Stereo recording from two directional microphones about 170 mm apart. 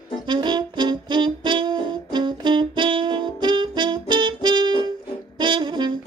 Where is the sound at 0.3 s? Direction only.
25° right (ahead or behind).